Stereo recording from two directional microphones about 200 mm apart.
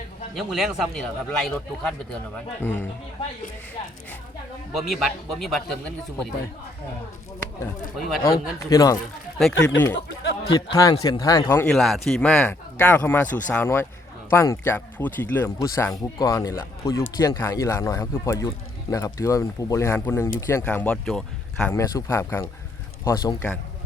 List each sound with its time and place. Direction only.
0.3 s speech: centre (ahead or behind)
4.7 s speech: centre (ahead or behind)
7.9 s speech: centre (ahead or behind)
8.2 s speech: 15° left (ahead or behind)
9.9 s speech: 60° left (ahead or behind)
10.8 s speech: 20° left (ahead or behind)
21.8 s a man's voice: 15° left (ahead or behind)